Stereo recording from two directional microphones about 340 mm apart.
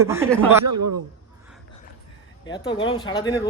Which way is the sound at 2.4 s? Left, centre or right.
Centre.